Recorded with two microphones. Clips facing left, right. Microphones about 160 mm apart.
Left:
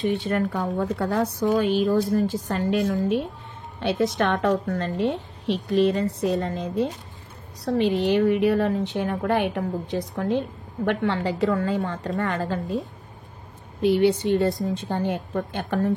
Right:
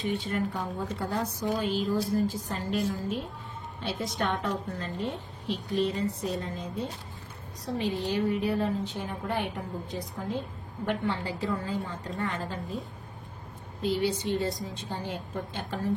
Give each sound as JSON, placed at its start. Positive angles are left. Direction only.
{"t": 0.1, "sound": "a woman's voice", "side_deg": 70}
{"t": 13.8, "sound": "a woman's voice", "side_deg": 65}